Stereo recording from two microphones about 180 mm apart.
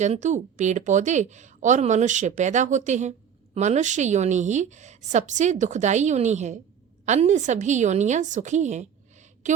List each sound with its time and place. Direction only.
0.0 s a woman's voice: 40° right (ahead or behind)